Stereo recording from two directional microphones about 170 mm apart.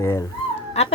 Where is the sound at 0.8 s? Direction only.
40° left (ahead or behind).